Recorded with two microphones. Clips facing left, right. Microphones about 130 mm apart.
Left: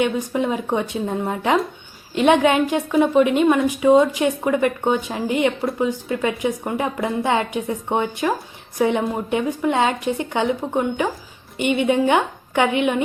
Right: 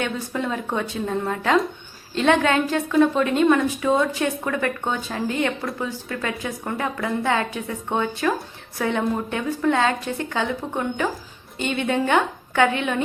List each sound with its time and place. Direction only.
0.0 s a woman's voice: 15° left (ahead or behind)